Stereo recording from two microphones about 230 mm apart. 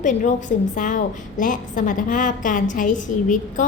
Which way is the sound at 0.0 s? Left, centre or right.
Left.